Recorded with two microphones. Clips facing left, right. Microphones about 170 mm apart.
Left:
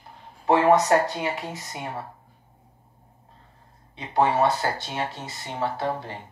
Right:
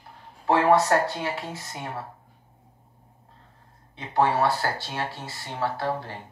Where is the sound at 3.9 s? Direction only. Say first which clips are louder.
Left 1 dB; 20° left (ahead or behind).